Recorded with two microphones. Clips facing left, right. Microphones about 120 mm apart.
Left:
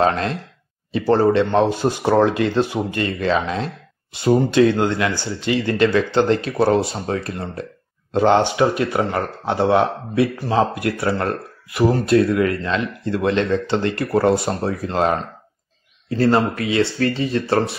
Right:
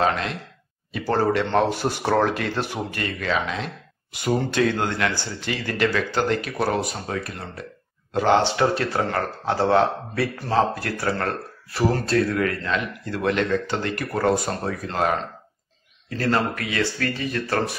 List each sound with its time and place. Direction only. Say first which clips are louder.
0.0 s speech: left 4 dB; 35° left (ahead or behind)
4.3 s speech: left 7 dB; 20° left (ahead or behind)
16.2 s speech: left 6 dB; 30° left (ahead or behind)